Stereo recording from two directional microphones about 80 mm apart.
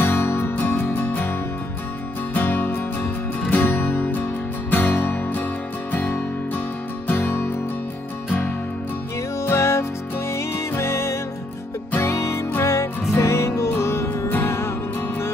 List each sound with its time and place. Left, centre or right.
0.0 s music: left
2.3 s music: left
9.4 s music: left